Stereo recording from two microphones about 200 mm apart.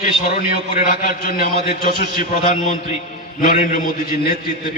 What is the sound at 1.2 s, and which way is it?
A man's voice, 45° left (ahead or behind).